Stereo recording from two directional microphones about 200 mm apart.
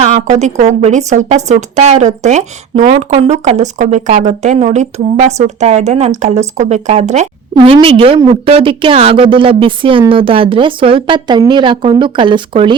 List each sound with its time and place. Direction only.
0.0 s a woman's voice: 35° right (ahead or behind)